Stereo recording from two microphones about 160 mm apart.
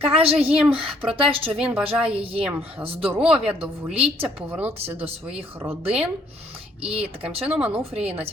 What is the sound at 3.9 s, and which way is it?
Speech, 35° right (ahead or behind).